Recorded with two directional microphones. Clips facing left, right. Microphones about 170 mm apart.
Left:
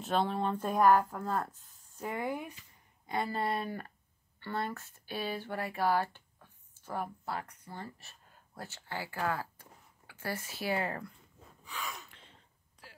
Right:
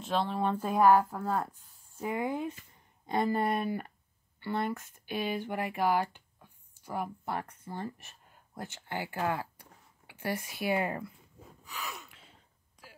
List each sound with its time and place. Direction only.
0.0 s speech: centre (ahead or behind); by 11.1 s 15° right (ahead or behind)
11.6 s gasp: 5° right (ahead or behind)